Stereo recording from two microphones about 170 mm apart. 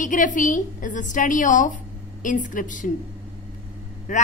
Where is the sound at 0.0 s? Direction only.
50° left (ahead or behind).